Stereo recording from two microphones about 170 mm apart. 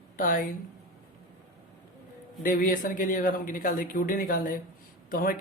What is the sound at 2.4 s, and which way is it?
A man's voice, 55° left (ahead or behind).